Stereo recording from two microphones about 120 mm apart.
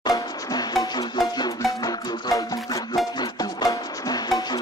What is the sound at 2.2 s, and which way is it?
Music, 35° left (ahead or behind).